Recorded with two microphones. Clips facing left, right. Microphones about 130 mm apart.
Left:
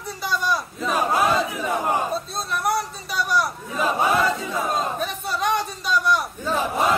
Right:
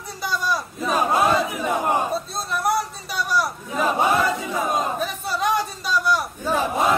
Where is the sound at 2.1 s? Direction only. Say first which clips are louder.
Right 1 dB; centre (ahead or behind).